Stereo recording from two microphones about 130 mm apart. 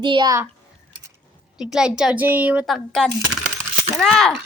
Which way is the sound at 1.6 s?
5° right (ahead or behind).